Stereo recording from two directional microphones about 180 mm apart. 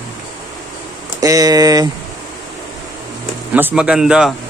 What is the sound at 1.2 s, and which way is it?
Speech, 20° right (ahead or behind).